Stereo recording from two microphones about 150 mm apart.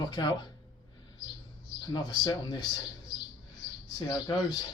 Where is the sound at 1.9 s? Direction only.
30° left (ahead or behind).